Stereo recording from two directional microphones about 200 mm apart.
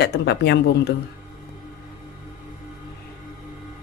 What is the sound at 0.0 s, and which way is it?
Speech, 55° left (ahead or behind).